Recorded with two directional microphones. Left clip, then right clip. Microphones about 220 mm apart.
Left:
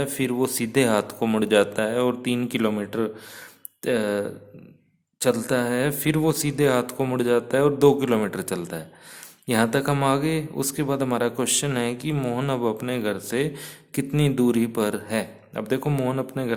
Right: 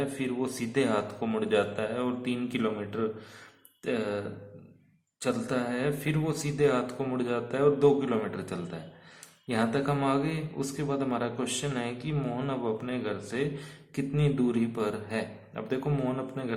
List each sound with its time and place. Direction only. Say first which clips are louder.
0.0 s a man's voice: left 7 dB; 50° left (ahead or behind)
5.2 s a man's voice: left 8 dB; 50° left (ahead or behind)